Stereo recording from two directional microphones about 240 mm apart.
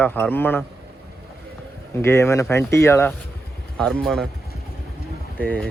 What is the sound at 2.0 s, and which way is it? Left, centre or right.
Speech, centre.